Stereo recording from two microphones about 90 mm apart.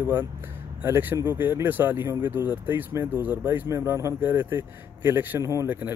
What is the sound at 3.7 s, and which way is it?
Speech, 30° right (ahead or behind).